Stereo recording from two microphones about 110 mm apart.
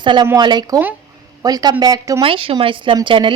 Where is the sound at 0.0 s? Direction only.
45° right (ahead or behind).